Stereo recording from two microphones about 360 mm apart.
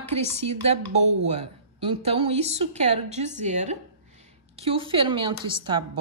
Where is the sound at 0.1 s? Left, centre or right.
Centre.